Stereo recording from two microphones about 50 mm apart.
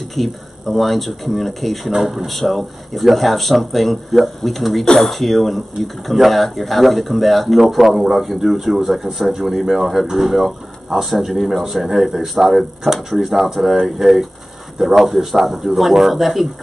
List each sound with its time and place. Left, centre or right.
0.1 s speech: centre